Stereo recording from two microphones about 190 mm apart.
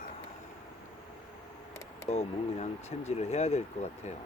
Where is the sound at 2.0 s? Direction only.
35° left (ahead or behind).